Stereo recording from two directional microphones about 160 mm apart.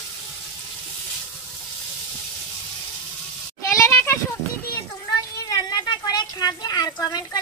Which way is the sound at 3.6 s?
15° left (ahead or behind).